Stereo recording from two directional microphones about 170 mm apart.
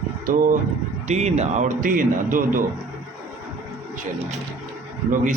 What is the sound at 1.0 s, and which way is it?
Speech, 40° right (ahead or behind).